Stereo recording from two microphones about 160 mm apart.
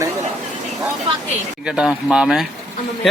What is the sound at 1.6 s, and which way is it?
Speech, 5° right (ahead or behind).